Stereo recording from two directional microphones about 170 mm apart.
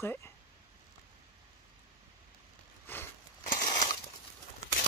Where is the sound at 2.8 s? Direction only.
10° left (ahead or behind).